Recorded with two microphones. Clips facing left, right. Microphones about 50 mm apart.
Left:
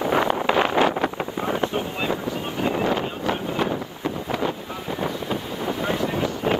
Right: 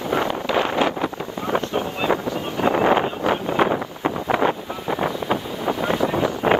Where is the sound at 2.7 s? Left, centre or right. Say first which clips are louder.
Right 7 dB; right.